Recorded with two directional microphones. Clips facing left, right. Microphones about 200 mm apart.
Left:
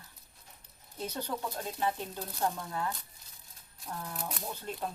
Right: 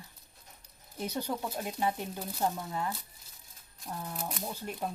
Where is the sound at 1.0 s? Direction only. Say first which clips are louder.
Right 2 dB; 10° right (ahead or behind).